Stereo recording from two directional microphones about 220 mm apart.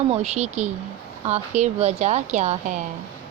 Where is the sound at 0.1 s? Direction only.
30° right (ahead or behind).